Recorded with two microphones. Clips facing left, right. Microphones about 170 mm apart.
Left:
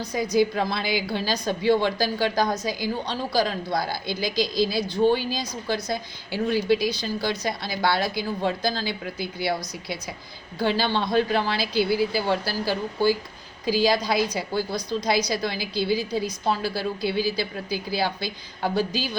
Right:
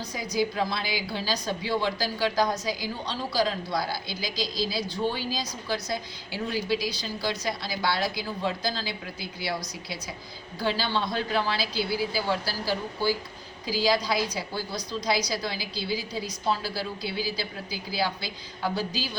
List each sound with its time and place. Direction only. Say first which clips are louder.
0.1 s a woman's voice: left 7 dB; 55° left (ahead or behind)
10.6 s a woman's voice: left 4 dB; 60° left (ahead or behind)